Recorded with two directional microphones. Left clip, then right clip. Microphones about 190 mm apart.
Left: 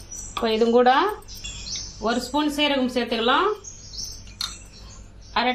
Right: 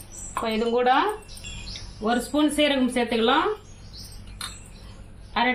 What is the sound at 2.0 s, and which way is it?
Speech, 50° left (ahead or behind).